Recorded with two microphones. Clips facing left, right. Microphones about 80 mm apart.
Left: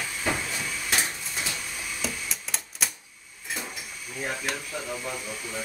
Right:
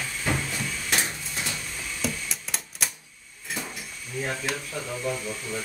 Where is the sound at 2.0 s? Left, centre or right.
Centre.